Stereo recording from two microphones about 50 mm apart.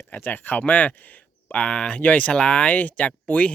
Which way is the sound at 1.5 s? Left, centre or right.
Centre.